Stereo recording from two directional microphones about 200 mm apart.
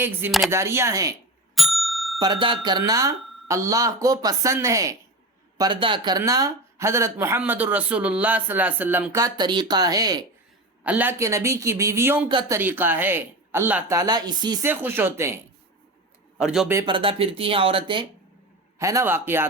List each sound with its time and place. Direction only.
0.3 s a man's voice: centre (ahead or behind)
0.5 s speech: 15° right (ahead or behind)
1.5 s bicycle bell: centre (ahead or behind)
2.1 s speech: 20° right (ahead or behind)
10.8 s speech: 10° right (ahead or behind)
12.3 s speech: 20° right (ahead or behind)
12.5 s speech: 10° right (ahead or behind)
14.7 s speech: 10° right (ahead or behind)
16.4 s a man's voice: 5° right (ahead or behind)
16.7 s speech: 25° right (ahead or behind)
18.8 s speech: 15° right (ahead or behind)